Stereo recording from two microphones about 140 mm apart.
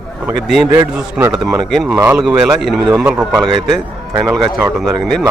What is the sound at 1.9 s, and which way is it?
A man's voice, 15° right (ahead or behind).